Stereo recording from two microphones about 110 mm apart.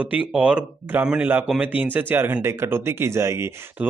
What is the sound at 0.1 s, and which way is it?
A man's voice, 10° right (ahead or behind).